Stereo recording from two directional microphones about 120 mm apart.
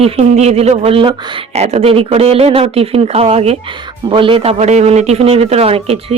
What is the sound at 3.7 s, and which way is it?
Speech, 45° right (ahead or behind).